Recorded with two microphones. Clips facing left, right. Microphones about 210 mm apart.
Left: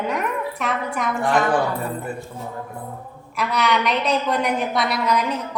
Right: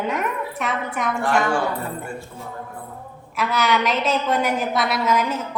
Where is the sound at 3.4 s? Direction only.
Centre (ahead or behind).